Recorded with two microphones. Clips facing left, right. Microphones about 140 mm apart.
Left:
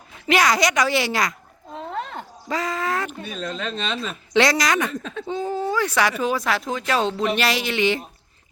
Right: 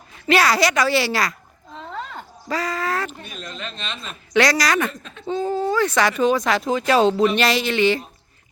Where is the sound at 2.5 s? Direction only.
20° left (ahead or behind).